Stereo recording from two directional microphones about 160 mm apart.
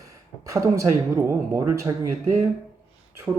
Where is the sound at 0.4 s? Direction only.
20° right (ahead or behind).